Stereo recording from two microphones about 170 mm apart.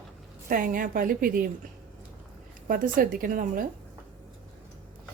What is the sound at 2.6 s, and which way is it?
A woman's voice, 55° right (ahead or behind).